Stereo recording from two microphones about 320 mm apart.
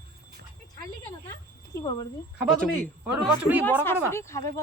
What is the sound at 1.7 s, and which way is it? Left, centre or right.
A man's voice, centre.